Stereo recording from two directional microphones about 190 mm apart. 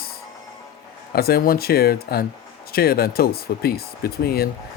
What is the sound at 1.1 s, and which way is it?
Speech, 55° left (ahead or behind).